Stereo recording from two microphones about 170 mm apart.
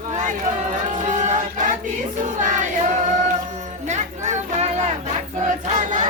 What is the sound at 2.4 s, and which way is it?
Choir, 50° right (ahead or behind).